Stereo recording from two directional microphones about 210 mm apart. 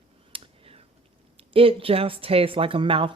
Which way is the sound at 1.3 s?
25° right (ahead or behind).